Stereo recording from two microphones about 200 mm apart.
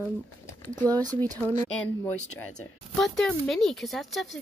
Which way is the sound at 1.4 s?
10° left (ahead or behind).